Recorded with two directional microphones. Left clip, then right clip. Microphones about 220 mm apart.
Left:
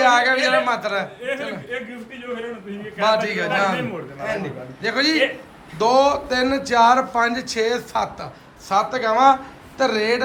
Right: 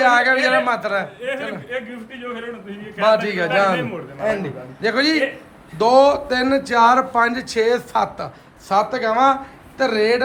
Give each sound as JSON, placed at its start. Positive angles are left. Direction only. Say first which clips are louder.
{"t": 0.0, "sound": "speech", "louder": "right 1 dB", "side_deg": 0}
{"t": 3.0, "sound": "speech", "louder": "right 2 dB", "side_deg": -5}